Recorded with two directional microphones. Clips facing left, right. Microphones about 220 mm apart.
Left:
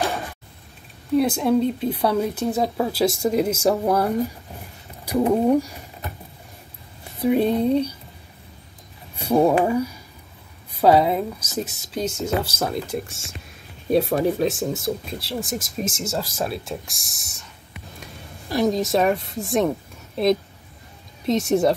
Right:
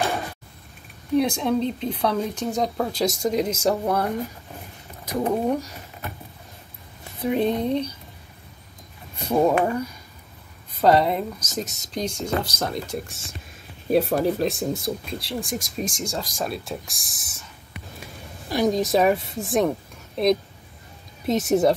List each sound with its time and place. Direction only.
1.1 s speech: 5° left (ahead or behind)
7.2 s speech: 10° left (ahead or behind)
9.1 s speech: 10° left (ahead or behind)
18.5 s speech: centre (ahead or behind)
21.3 s speech: centre (ahead or behind)